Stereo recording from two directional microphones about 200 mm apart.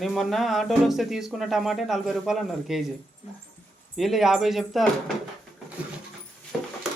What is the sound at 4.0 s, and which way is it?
Speech, centre (ahead or behind).